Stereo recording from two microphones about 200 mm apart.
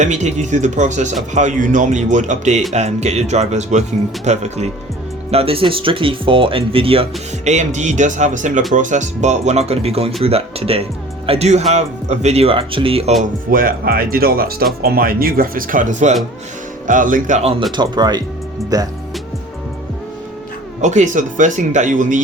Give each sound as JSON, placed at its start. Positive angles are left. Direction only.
{"t": 0.0, "sound": "speech", "side_deg": -35}
{"t": 13.2, "sound": "speech", "side_deg": -45}
{"t": 17.7, "sound": "speech", "side_deg": -20}
{"t": 20.8, "sound": "speech", "side_deg": -35}